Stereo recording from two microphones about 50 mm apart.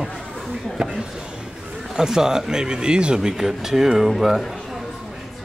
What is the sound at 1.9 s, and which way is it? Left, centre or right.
Speech, centre.